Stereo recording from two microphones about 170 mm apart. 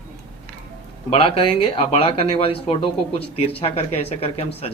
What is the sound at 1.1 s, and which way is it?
Speech, 35° left (ahead or behind).